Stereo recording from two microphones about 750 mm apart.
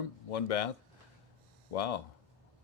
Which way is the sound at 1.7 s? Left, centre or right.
Left.